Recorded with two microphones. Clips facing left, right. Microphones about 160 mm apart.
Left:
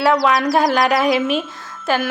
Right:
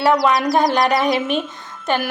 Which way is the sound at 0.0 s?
Centre (ahead or behind).